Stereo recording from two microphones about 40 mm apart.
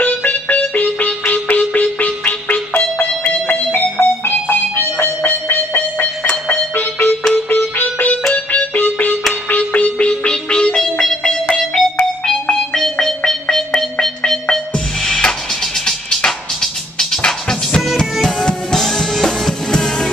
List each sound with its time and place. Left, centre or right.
0.0 s music: left
5.0 s a sound: left
5.7 s music: left
6.2 s music: left
6.5 s music: left
8.3 s music: left
9.8 s music: left; by 11.8 s centre
13.0 s music: centre
17.3 s music: centre
19.7 s music: centre